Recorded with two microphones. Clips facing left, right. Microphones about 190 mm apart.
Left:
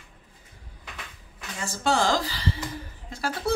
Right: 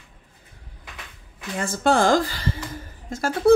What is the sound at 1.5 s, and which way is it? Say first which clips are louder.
Speech: right 5 dB; 55° right (ahead or behind).